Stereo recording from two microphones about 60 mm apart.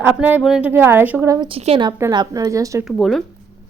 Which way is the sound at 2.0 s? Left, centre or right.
Right.